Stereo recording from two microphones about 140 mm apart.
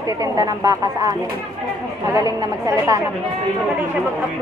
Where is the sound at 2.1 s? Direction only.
25° right (ahead or behind).